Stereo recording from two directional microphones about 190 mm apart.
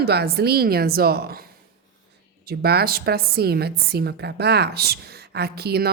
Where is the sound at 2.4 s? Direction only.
55° right (ahead or behind).